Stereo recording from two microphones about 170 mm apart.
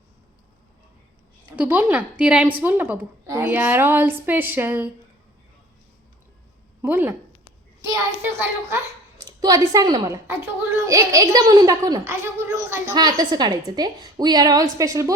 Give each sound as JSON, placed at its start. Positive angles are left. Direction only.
{"t": 1.5, "sound": "a woman's voice", "side_deg": -10}
{"t": 6.8, "sound": "a woman's voice", "side_deg": -10}